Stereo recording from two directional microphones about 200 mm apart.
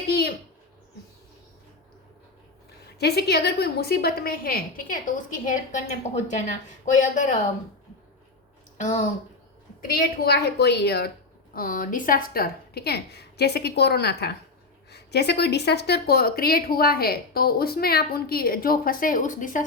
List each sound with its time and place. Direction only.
0.1 s bird: 50° left (ahead or behind)
2.8 s speech: 55° left (ahead or behind); by 7.3 s 40° left (ahead or behind)
8.8 s speech: 40° left (ahead or behind)